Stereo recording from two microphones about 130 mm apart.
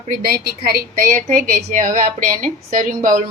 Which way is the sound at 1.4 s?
80° right.